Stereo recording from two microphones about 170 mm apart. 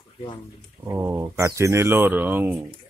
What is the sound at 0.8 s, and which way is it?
A man's voice, 15° right (ahead or behind).